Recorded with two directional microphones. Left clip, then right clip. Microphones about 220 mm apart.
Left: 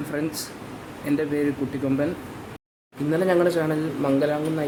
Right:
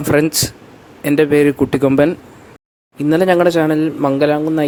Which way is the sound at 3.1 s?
40° right (ahead or behind).